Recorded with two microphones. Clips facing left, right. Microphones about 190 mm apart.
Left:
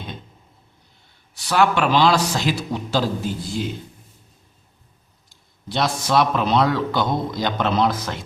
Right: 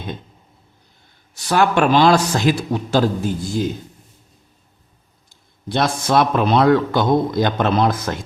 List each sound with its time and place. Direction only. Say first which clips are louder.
1.3 s a man's voice: right 2 dB; 45° right (ahead or behind)
5.3 s a man's voice: right 5 dB; 50° right (ahead or behind)